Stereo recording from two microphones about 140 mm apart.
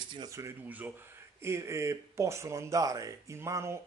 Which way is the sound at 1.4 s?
20° right (ahead or behind).